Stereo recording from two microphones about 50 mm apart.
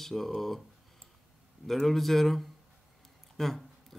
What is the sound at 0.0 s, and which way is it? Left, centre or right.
Speech, centre.